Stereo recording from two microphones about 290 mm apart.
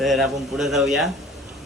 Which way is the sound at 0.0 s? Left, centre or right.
Centre.